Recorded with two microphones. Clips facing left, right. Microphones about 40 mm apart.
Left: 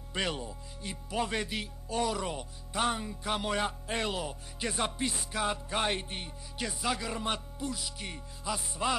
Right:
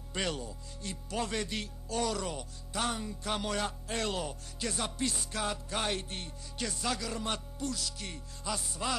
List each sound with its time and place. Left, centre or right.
0.1 s music: centre
4.1 s music: centre
4.6 s music: left